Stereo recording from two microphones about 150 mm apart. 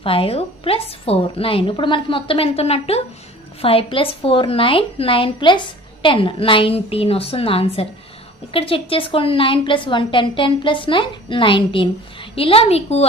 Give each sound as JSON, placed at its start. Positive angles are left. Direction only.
{"t": 0.0, "sound": "a woman's voice", "side_deg": 40}